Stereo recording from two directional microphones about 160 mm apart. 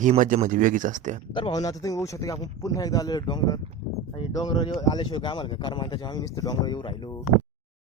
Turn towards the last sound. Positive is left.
turn(degrees=30)  # may be behind; listen again after turning